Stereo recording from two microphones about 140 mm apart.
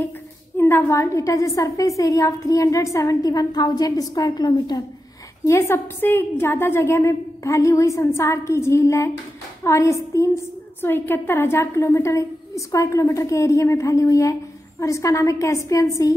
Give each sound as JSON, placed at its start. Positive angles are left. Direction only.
{"t": 0.6, "sound": "a woman's voice", "side_deg": 15}
{"t": 5.5, "sound": "a woman's voice", "side_deg": 15}